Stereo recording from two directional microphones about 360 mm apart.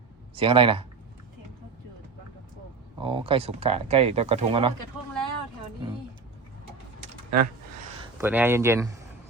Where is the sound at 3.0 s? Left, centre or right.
Centre.